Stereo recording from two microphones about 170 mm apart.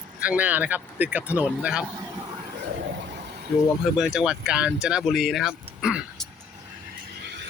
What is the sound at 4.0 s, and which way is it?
Speech, 5° right (ahead or behind).